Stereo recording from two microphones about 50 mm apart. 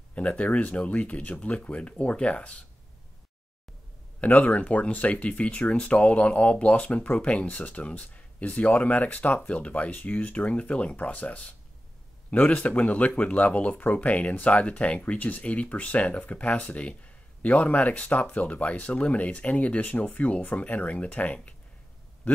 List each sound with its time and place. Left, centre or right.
0.1 s speech: left
4.2 s speech: left